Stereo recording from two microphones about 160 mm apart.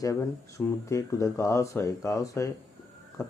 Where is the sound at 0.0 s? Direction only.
20° left (ahead or behind).